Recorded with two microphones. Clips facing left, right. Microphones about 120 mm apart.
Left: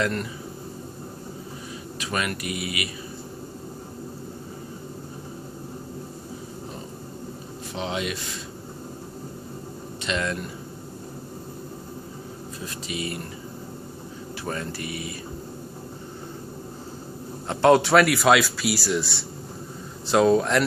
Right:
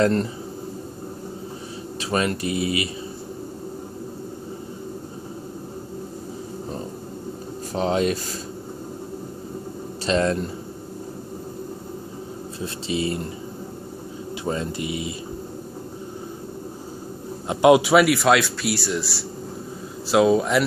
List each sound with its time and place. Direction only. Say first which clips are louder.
0.0 s speech: right 7 dB; 30° right (ahead or behind)
2.0 s speech: right 5 dB; 30° right (ahead or behind)
7.7 s speech: right 8 dB; 40° right (ahead or behind)
10.0 s speech: right 7 dB; 35° right (ahead or behind)
12.6 s speech: right 7 dB; 30° right (ahead or behind)
14.4 s speech: right 5 dB; 20° right (ahead or behind)
17.5 s a man's voice: right 2 dB; 15° right (ahead or behind)
17.8 s a man's voice: right 1 dB; centre (ahead or behind)